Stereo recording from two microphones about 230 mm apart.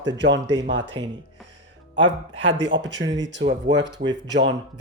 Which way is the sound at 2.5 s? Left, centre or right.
Right.